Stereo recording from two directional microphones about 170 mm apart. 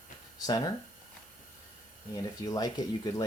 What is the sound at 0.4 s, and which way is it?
Speech, 25° left (ahead or behind).